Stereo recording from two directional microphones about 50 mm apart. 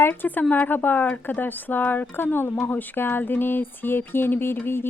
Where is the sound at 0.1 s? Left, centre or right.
Left.